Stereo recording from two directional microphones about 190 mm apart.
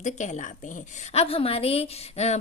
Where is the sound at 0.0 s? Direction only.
40° left (ahead or behind).